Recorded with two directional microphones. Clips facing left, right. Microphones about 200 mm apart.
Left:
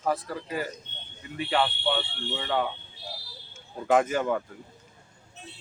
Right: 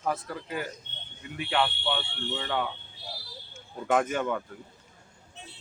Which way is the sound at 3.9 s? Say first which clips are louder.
Left 3 dB; 5° left (ahead or behind).